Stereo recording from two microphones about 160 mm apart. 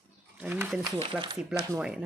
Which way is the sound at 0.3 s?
10° right (ahead or behind).